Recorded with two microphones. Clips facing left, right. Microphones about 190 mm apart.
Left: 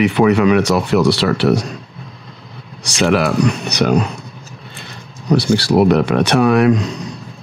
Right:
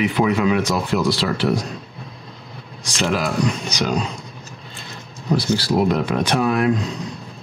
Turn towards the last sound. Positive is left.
turn(degrees=80)